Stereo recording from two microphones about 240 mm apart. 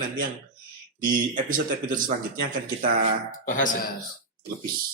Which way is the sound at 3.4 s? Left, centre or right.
Left.